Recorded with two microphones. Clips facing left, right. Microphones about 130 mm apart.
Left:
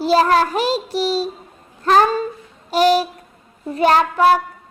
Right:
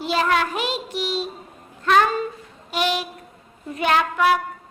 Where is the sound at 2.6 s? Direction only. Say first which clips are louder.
Left 9 dB; 35° left (ahead or behind).